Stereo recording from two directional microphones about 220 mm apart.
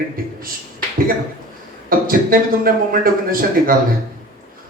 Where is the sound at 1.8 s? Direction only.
40° right (ahead or behind).